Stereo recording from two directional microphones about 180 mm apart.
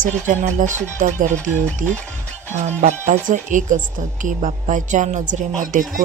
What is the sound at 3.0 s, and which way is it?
A woman's voice, 45° right (ahead or behind).